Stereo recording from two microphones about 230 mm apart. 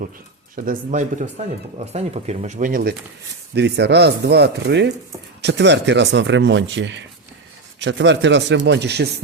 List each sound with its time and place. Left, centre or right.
0.5 s speech: right
3.5 s speech: right